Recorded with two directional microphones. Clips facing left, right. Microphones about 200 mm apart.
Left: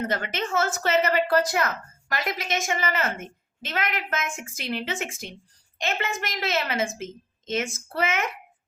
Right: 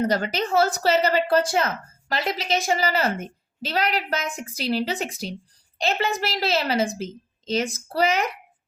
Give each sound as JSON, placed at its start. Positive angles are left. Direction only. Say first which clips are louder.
{"t": 0.0, "sound": "a woman's voice", "louder": "right 5 dB", "side_deg": -35}